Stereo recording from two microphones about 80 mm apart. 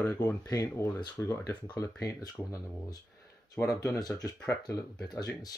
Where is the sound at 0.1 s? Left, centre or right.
Left.